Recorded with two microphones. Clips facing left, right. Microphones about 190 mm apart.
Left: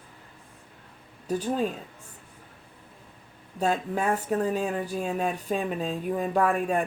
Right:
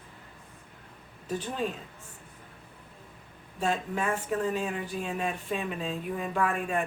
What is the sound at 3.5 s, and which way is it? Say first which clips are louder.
Speech: left 3 dB; 35° left (ahead or behind).